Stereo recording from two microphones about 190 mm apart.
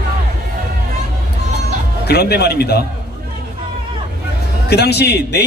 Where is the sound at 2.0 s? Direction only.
55° left (ahead or behind).